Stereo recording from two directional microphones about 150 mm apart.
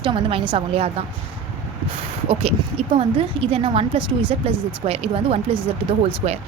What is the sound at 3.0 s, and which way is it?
A woman's voice, 40° right (ahead or behind).